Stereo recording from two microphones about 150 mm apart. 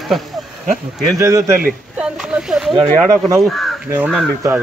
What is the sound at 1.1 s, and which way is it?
Speech, 20° right (ahead or behind).